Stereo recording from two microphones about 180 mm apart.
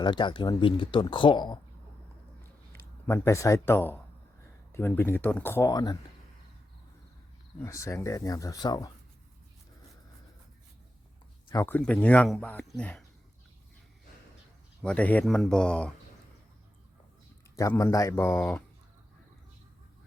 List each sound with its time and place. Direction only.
0.0 s speech: 25° left (ahead or behind)
3.1 s speech: 15° left (ahead or behind)
7.6 s speech: 15° left (ahead or behind)
11.4 s speech: 15° left (ahead or behind)
14.8 s speech: 5° left (ahead or behind)
17.6 s speech: 15° left (ahead or behind)